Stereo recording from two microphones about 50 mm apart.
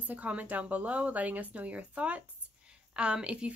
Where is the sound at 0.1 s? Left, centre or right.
Right.